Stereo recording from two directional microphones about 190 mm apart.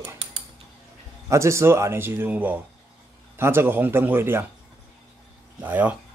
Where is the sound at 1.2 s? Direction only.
15° right (ahead or behind).